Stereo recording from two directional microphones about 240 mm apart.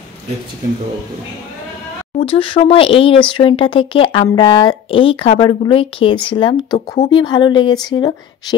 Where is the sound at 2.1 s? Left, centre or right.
Left.